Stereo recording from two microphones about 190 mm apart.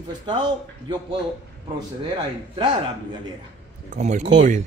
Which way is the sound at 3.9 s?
40° right (ahead or behind).